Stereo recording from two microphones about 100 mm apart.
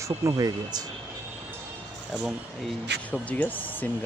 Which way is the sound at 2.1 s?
10° right (ahead or behind).